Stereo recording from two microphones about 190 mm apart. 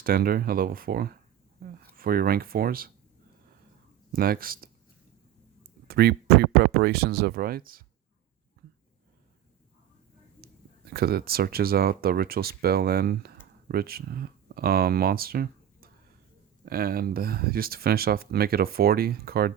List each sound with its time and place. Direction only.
0.0 s speech: 50° right (ahead or behind)
4.1 s speech: 50° right (ahead or behind)
5.9 s speech: 55° right (ahead or behind)
10.9 s speech: 55° right (ahead or behind)